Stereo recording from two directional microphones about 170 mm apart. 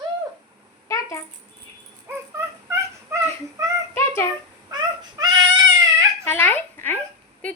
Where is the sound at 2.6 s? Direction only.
15° right (ahead or behind).